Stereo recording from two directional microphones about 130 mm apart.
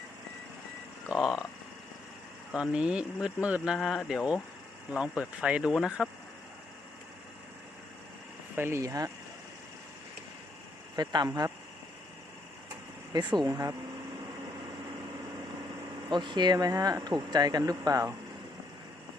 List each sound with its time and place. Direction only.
1.0 s speech: centre (ahead or behind)
2.5 s speech: 5° right (ahead or behind)
8.5 s speech: 20° right (ahead or behind)
10.9 s speech: 35° right (ahead or behind)
13.1 s speech: 30° right (ahead or behind)
16.0 s speech: 35° right (ahead or behind)